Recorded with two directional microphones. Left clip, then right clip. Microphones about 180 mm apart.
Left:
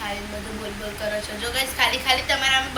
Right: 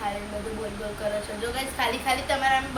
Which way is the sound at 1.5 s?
55° right (ahead or behind).